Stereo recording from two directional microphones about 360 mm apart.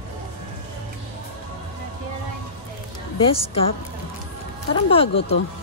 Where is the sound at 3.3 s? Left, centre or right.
Centre.